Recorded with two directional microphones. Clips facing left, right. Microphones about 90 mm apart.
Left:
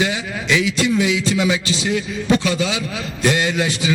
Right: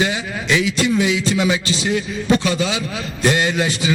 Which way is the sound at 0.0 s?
40° right (ahead or behind).